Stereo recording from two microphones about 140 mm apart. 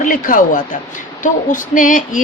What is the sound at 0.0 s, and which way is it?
Speech, 75° left (ahead or behind).